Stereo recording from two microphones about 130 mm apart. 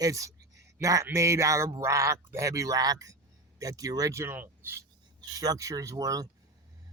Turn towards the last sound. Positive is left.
turn(degrees=-25)  # may be behind; listen again after turning